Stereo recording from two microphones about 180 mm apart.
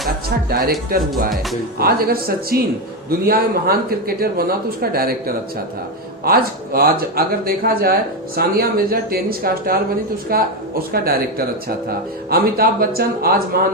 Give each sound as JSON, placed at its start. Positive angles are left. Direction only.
{"t": 1.8, "sound": "a woman's voice", "side_deg": -55}